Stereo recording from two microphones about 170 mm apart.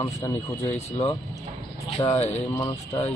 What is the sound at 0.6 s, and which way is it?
A man's voice, 40° left (ahead or behind).